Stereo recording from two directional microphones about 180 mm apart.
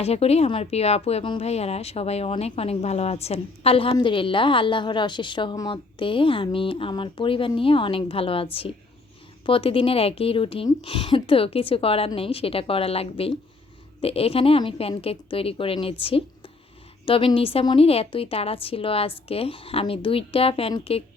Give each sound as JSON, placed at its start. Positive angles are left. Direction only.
{"t": 0.0, "sound": "speech", "side_deg": 35}